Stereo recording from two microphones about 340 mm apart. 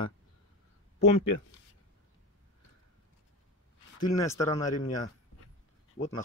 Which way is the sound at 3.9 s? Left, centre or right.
Centre.